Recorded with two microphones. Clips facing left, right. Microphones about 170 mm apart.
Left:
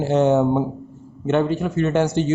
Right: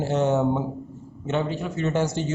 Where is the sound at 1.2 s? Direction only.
55° left (ahead or behind).